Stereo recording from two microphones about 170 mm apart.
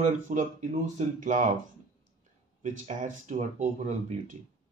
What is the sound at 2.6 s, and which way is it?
Speech, 45° right (ahead or behind).